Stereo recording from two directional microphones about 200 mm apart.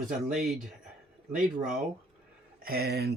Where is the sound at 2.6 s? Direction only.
50° right (ahead or behind).